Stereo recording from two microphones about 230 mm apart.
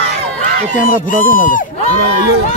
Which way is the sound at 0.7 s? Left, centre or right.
Left.